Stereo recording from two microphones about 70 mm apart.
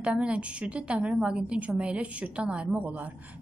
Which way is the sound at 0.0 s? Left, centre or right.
Centre.